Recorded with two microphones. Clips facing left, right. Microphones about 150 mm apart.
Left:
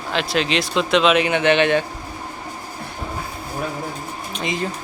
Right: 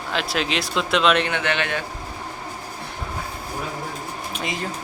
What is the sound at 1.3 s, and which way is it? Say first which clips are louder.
Speech: left 8 dB; 20° left (ahead or behind).